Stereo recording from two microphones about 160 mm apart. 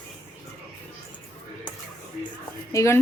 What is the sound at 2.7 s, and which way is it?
Speech, 15° left (ahead or behind).